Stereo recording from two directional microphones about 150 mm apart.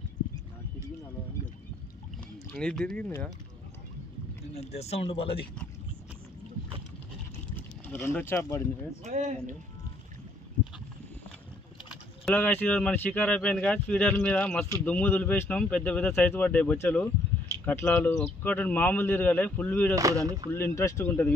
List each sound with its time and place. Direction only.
2.5 s speech: 5° left (ahead or behind)
4.6 s speech: 45° left (ahead or behind)
7.5 s speech: 15° left (ahead or behind)
9.0 s speech: 50° right (ahead or behind)
12.4 s speech: 10° left (ahead or behind)
20.0 s speech: 20° right (ahead or behind)
20.5 s speech: 15° left (ahead or behind)